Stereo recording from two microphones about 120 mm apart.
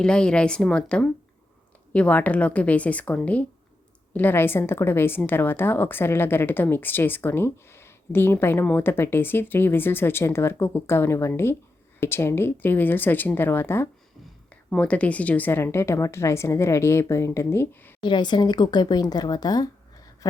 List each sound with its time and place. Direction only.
0.0 s a woman's voice: 5° left (ahead or behind)
18.0 s speech: 40° left (ahead or behind)